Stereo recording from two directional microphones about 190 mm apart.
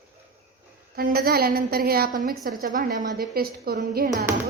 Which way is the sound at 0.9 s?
55° right (ahead or behind).